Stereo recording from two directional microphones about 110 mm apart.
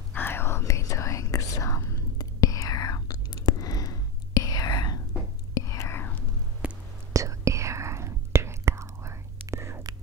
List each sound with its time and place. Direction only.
0.1 s whispering: 20° left (ahead or behind)
6.6 s whispering: 10° right (ahead or behind)
7.1 s whispering: 30° right (ahead or behind)